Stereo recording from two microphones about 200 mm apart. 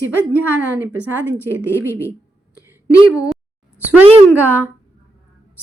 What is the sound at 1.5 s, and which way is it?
Speech, 10° right (ahead or behind).